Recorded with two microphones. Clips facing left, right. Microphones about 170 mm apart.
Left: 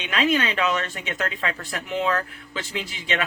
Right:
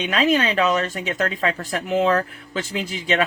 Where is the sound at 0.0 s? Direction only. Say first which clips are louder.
Right 3 dB; 40° right (ahead or behind).